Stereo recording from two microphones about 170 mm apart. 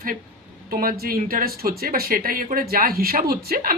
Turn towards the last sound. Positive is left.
turn(degrees=-60)  # may be behind; listen again after turning